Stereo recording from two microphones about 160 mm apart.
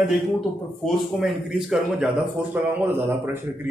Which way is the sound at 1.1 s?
Centre (ahead or behind).